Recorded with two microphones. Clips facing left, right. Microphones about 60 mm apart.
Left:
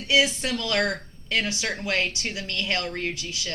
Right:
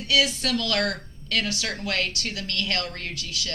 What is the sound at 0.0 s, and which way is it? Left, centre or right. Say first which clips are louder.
Speech: left 1 dB; left.